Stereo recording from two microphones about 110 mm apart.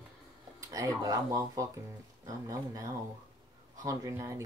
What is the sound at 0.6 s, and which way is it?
Speech, 30° right (ahead or behind).